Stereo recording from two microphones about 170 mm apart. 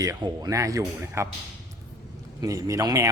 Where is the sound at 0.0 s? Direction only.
20° right (ahead or behind).